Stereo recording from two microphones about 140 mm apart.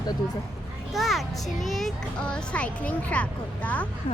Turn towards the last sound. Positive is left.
turn(degrees=10)  # may be behind; listen again after turning